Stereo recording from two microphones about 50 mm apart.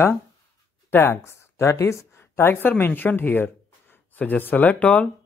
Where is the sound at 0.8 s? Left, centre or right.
Left.